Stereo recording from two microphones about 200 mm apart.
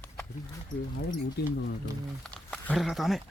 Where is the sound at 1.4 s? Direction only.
55° left (ahead or behind).